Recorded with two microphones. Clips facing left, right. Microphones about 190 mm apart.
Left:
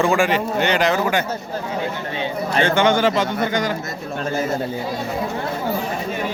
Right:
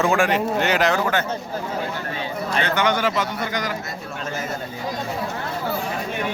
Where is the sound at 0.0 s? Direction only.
Centre (ahead or behind).